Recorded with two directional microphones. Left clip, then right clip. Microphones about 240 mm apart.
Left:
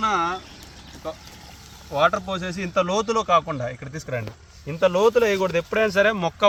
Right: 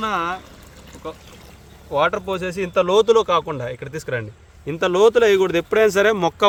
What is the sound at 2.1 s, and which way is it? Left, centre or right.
Speech, right.